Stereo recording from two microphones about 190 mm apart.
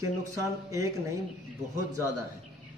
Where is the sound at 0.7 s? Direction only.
15° right (ahead or behind).